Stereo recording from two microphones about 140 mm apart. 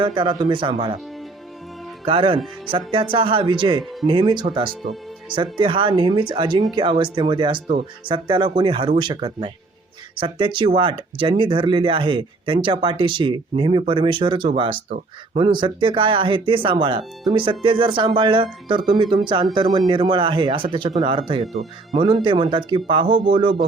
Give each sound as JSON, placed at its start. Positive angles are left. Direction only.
{"t": 0.0, "sound": "speech", "side_deg": -35}
{"t": 2.0, "sound": "speech", "side_deg": -40}
{"t": 21.4, "sound": "speech", "side_deg": 0}
{"t": 21.9, "sound": "speech", "side_deg": -40}